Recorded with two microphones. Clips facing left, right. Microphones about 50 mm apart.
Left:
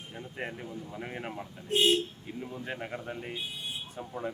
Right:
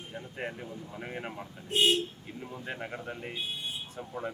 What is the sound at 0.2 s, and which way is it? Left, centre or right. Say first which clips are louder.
Speech: even; centre.